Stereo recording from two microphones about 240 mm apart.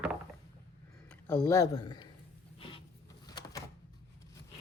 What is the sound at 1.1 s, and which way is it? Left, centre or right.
Speech, centre.